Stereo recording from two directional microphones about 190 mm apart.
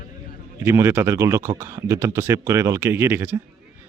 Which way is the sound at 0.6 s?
15° right (ahead or behind).